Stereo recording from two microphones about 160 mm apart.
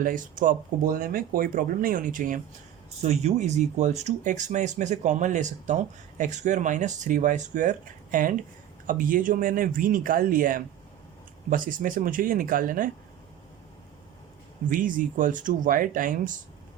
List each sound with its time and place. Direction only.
0.0 s speech: 55° right (ahead or behind)
3.0 s speech: 40° right (ahead or behind); by 12.9 s 60° right (ahead or behind)
14.7 s speech: 55° right (ahead or behind)